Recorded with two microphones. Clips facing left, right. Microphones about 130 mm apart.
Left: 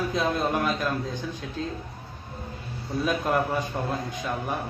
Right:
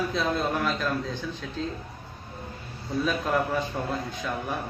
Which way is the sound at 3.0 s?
15° left (ahead or behind).